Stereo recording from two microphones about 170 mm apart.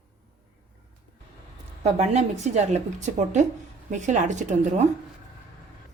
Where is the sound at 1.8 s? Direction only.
40° right (ahead or behind).